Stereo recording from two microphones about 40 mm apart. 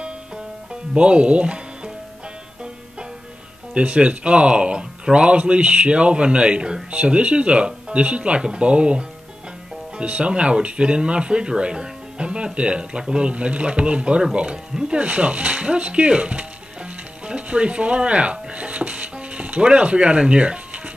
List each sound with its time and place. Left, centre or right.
0.9 s speech: right
3.7 s speech: right
15.0 s speech: right